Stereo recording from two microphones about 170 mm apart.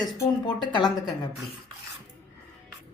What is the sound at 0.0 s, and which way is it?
A woman's voice, 25° left (ahead or behind).